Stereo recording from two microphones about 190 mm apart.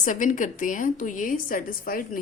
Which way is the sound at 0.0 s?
45° left (ahead or behind).